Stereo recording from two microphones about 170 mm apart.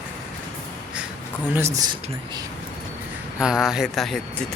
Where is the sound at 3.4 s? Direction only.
5° right (ahead or behind).